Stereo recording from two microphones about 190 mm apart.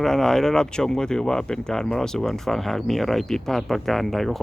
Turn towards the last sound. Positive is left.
turn(degrees=0)  # may be behind; listen again after turning